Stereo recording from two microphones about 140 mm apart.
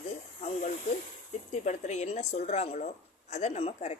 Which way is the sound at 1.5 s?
55° left (ahead or behind).